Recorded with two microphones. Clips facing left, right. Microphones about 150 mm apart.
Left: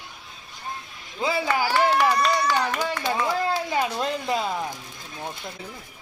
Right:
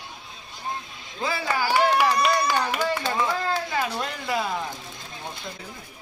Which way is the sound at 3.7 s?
20° left (ahead or behind).